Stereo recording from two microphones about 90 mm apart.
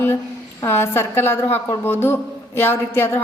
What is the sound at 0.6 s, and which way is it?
A woman's voice, 25° left (ahead or behind).